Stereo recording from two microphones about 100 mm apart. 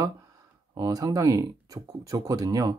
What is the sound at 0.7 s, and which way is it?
Speech, 40° right (ahead or behind).